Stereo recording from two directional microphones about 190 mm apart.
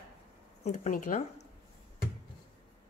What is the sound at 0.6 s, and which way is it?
Speech, 40° left (ahead or behind).